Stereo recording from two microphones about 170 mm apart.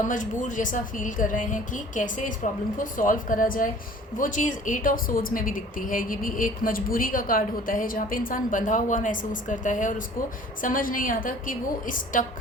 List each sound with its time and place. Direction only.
0.0 s speech: 50° left (ahead or behind)